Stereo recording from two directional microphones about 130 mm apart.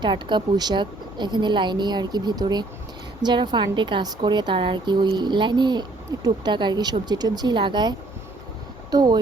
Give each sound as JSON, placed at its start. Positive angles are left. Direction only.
{"t": 0.0, "sound": "speech", "side_deg": -35}